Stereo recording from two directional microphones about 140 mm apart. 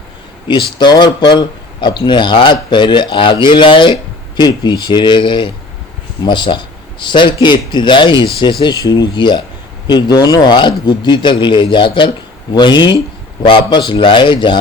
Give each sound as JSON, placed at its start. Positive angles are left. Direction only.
{"t": 0.4, "sound": "speech", "side_deg": 35}